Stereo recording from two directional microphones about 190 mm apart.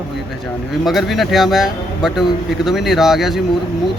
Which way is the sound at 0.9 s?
Centre (ahead or behind).